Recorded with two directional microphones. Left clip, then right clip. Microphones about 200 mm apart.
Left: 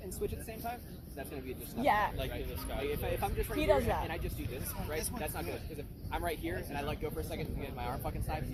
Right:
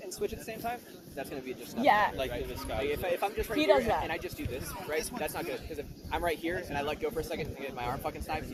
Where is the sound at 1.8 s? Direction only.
20° left (ahead or behind).